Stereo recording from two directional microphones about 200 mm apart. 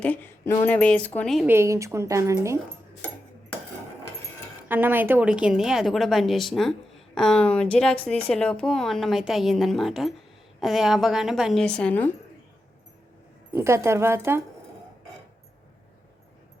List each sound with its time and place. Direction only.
0.0 s speech: 10° left (ahead or behind)
1.5 s a woman's voice: 15° right (ahead or behind)
4.7 s a woman's voice: 10° right (ahead or behind); by 12.1 s 10° left (ahead or behind)
13.5 s a woman's voice: 15° right (ahead or behind)